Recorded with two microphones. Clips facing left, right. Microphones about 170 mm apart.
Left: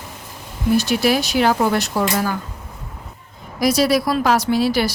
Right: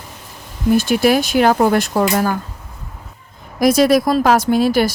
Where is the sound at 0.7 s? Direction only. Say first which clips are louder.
Right 3 dB; 50° right (ahead or behind).